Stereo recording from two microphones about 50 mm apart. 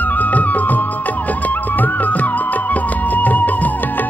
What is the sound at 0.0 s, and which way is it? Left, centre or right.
Music, left.